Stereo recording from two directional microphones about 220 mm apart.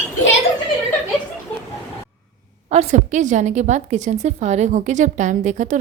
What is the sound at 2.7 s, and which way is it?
A woman's voice, 30° right (ahead or behind).